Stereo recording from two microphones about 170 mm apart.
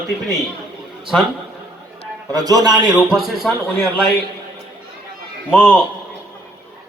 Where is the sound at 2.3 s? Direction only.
20° right (ahead or behind).